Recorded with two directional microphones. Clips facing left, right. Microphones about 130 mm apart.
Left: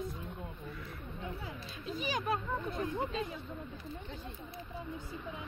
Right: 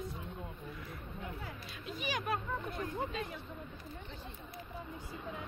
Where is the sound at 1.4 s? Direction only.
25° left (ahead or behind).